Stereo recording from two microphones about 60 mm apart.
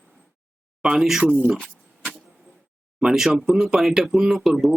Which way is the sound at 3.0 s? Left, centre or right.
Centre.